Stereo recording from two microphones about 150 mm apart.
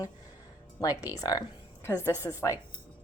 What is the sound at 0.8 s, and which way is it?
A woman's voice, 25° left (ahead or behind).